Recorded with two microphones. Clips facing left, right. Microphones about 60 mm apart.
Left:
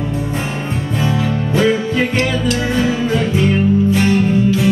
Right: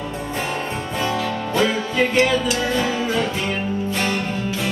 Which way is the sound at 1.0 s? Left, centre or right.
Centre.